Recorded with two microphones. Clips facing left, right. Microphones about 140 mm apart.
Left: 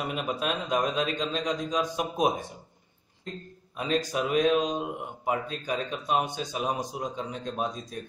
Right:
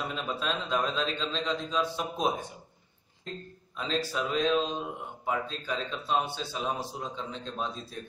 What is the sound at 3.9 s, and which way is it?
Speech, 15° left (ahead or behind).